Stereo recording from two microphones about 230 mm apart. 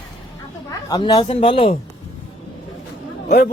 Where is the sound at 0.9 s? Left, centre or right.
Centre.